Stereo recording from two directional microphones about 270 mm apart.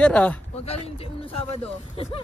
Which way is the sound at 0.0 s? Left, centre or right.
Centre.